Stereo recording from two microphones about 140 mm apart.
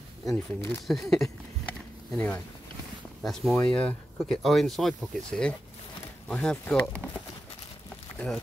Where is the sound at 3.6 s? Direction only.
10° left (ahead or behind).